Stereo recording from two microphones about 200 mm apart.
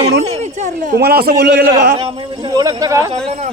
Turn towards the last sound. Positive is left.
turn(degrees=-15)  # may be behind; listen again after turning